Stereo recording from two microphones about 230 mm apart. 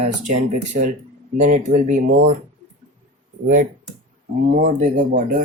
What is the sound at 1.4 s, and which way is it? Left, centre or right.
Speech, right.